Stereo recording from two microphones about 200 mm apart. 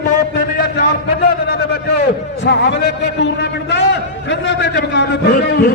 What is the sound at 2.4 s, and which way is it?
A man's voice, 60° left (ahead or behind).